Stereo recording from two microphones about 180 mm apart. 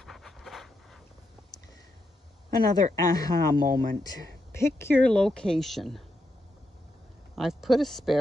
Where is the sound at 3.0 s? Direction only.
20° left (ahead or behind).